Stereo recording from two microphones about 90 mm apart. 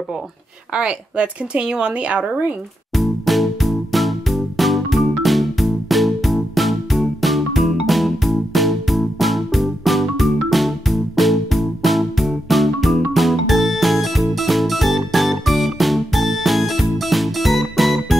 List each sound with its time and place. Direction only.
0.7 s a woman's voice: 10° right (ahead or behind)
2.9 s music: centre (ahead or behind)